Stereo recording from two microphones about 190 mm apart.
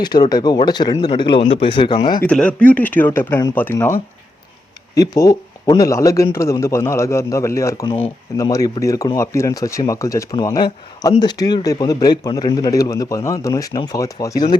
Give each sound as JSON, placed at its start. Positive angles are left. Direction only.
{"t": 0.0, "sound": "a man's voice", "side_deg": 20}
{"t": 2.2, "sound": "a man's voice", "side_deg": 5}
{"t": 4.9, "sound": "a man's voice", "side_deg": 20}